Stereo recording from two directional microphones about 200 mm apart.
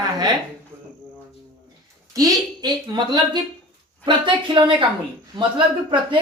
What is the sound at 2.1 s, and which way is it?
A woman's voice, 20° right (ahead or behind).